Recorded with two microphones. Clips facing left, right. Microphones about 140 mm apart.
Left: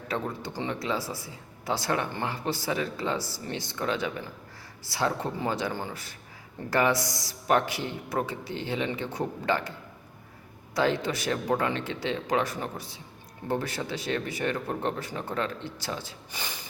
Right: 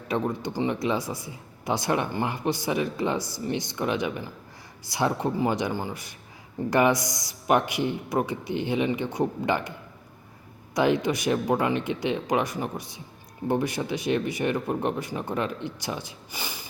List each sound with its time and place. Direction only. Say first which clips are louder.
0.1 s speech: right 5 dB; 15° right (ahead or behind)
10.8 s speech: right 3 dB; 15° right (ahead or behind)